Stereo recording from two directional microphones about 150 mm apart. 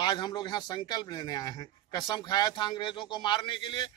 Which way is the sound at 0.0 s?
30° left (ahead or behind).